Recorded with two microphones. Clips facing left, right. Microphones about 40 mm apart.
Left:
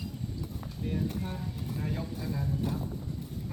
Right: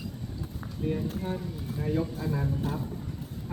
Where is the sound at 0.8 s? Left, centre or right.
Centre.